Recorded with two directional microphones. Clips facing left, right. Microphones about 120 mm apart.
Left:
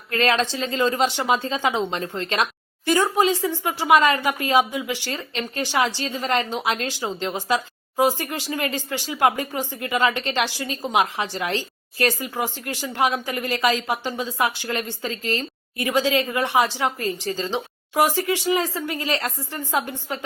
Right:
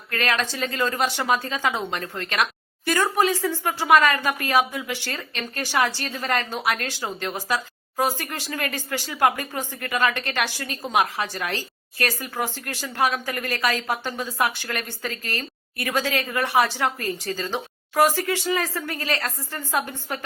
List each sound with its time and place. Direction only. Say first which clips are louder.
0.1 s a woman's voice: left 4 dB; 25° left (ahead or behind)